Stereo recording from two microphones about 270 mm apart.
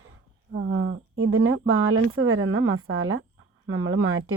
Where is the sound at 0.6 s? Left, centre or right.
Right.